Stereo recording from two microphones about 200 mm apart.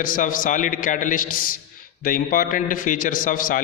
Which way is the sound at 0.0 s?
45° left (ahead or behind).